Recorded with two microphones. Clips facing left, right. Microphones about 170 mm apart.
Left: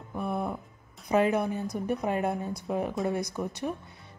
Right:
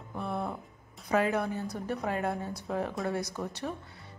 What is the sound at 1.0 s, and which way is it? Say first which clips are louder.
A woman's voice: left 3 dB; 20° left (ahead or behind).